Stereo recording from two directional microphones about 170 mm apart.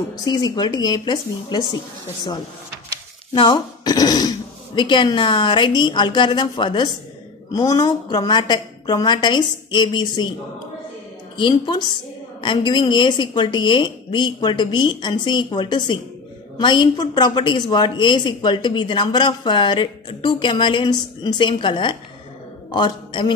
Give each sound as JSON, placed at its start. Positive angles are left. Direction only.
{"t": 0.2, "sound": "a woman's voice", "side_deg": 25}
{"t": 3.3, "sound": "a woman's voice", "side_deg": 25}
{"t": 11.3, "sound": "a woman's voice", "side_deg": 30}